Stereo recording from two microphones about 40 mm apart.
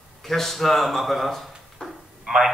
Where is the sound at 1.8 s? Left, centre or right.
Left.